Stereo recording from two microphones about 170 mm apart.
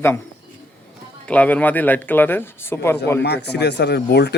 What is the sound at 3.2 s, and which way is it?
Speech, 75° left (ahead or behind).